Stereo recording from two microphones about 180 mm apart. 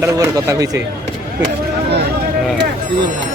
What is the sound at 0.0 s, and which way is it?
Speech, 15° right (ahead or behind).